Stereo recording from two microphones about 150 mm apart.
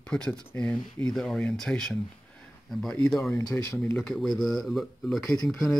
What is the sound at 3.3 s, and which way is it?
Speech, 20° left (ahead or behind).